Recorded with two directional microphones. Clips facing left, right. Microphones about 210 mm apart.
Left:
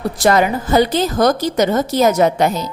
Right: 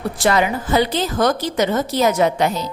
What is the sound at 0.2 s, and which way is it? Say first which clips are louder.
A woman's voice: left 3 dB; 45° left (ahead or behind).